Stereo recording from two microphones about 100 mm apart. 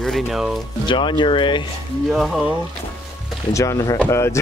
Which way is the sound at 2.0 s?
Centre (ahead or behind).